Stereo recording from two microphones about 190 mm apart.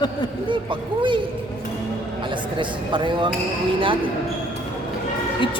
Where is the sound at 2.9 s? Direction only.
25° right (ahead or behind).